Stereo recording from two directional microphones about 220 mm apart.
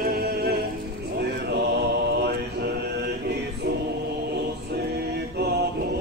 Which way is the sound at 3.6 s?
45° right (ahead or behind).